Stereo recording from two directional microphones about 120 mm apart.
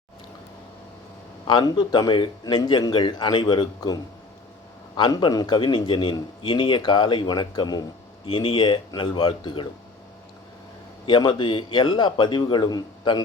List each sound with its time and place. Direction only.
1.5 s a man's voice: 40° left (ahead or behind)
11.0 s a man's voice: 40° left (ahead or behind)